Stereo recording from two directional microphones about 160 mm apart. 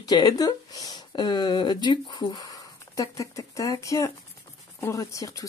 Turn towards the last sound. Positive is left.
turn(degrees=20)  # may be behind; listen again after turning